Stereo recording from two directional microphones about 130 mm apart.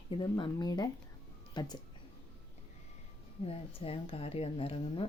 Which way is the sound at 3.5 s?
50° left (ahead or behind).